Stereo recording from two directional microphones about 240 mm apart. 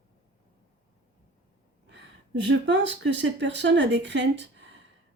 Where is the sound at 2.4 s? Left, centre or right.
Right.